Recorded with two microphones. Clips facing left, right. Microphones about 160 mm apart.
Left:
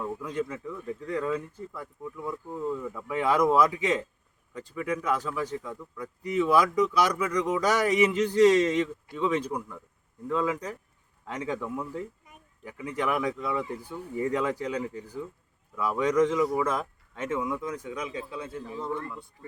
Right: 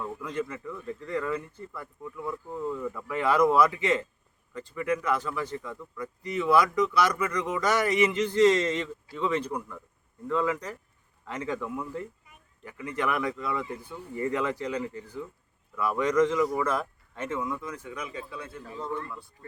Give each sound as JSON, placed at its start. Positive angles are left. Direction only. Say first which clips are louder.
{"t": 0.3, "sound": "speech", "louder": "left 1 dB", "side_deg": 15}
{"t": 9.5, "sound": "a man's voice", "louder": "left 1 dB", "side_deg": 0}
{"t": 10.2, "sound": "speech", "louder": "even", "side_deg": 15}
{"t": 12.9, "sound": "speech", "louder": "left 1 dB", "side_deg": 15}